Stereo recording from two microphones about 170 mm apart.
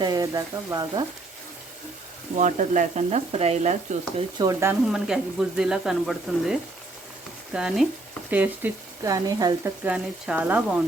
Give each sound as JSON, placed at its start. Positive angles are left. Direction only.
{"t": 0.0, "sound": "speech", "side_deg": -25}
{"t": 2.3, "sound": "frying", "side_deg": -45}
{"t": 4.4, "sound": "speech", "side_deg": -20}
{"t": 4.9, "sound": "speech", "side_deg": -5}
{"t": 9.8, "sound": "speech", "side_deg": -5}